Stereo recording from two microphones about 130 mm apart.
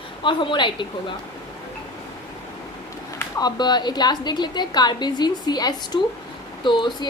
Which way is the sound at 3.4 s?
30° left (ahead or behind).